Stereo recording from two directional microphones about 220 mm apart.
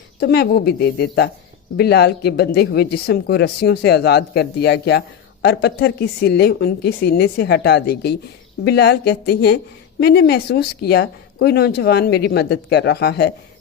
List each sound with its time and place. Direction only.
0.2 s speech: 45° left (ahead or behind)